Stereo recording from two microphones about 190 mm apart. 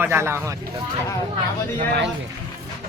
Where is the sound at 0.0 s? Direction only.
10° right (ahead or behind).